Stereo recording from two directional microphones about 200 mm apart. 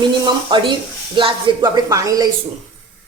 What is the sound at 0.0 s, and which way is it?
Speech, 25° right (ahead or behind).